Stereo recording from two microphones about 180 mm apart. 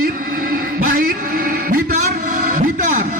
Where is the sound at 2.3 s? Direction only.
45° right (ahead or behind).